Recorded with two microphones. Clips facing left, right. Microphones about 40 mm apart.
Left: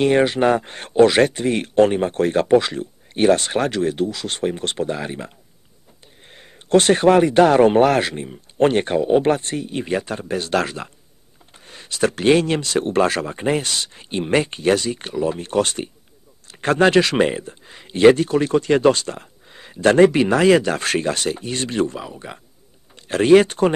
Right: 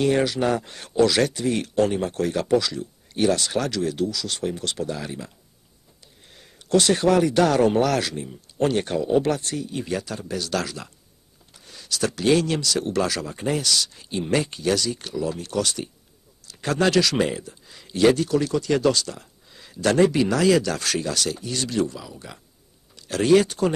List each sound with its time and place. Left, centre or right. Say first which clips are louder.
0.0 s speech: left 5 dB; left